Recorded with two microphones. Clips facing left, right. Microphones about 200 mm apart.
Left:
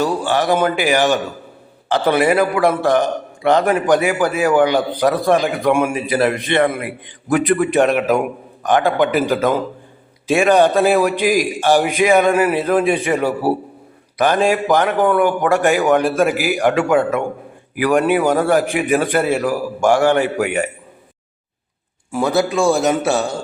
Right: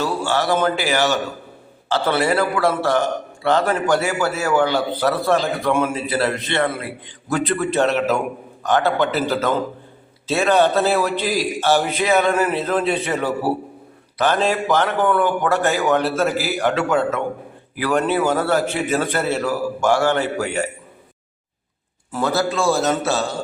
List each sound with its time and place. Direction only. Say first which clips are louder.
0.0 s a man's voice: left 3 dB; 15° left (ahead or behind)
22.1 s a man's voice: left 4 dB; 15° left (ahead or behind)